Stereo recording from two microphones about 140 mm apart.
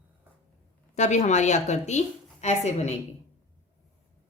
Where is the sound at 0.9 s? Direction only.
55° left (ahead or behind).